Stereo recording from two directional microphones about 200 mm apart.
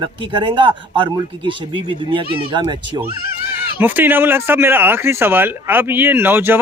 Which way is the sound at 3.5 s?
10° right (ahead or behind).